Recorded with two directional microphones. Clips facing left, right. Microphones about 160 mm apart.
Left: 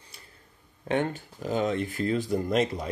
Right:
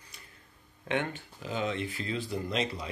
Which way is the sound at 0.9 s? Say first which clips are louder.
Left 5 dB; 40° left (ahead or behind).